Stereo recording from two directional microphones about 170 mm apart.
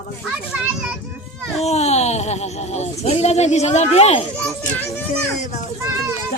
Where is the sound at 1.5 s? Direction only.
40° left (ahead or behind).